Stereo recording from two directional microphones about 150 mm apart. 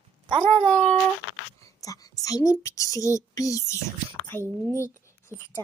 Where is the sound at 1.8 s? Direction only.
25° left (ahead or behind).